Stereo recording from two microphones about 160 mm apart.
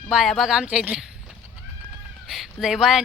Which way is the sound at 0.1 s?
Centre (ahead or behind).